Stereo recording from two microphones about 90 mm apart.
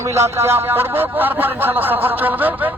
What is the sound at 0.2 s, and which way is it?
Speech, 30° right (ahead or behind).